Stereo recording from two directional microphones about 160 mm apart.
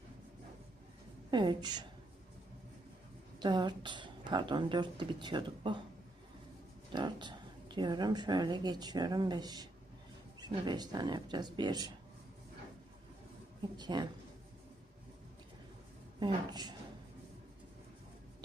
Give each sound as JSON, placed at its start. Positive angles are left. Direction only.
{"t": 1.3, "sound": "a woman's voice", "side_deg": -30}
{"t": 3.4, "sound": "a woman's voice", "side_deg": -30}
{"t": 6.9, "sound": "a woman's voice", "side_deg": -30}
{"t": 13.7, "sound": "a woman's voice", "side_deg": -25}
{"t": 16.2, "sound": "a woman's voice", "side_deg": -25}